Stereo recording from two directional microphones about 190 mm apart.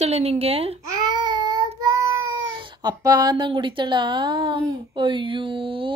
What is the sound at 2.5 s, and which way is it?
Speech, 25° right (ahead or behind).